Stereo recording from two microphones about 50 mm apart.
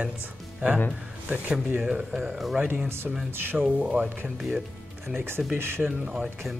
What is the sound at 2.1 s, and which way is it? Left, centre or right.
Speech, centre.